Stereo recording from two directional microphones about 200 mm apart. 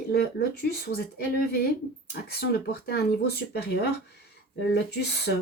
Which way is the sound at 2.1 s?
50° left (ahead or behind).